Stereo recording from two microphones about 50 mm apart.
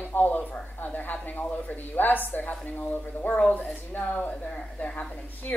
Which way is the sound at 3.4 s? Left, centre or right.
Left.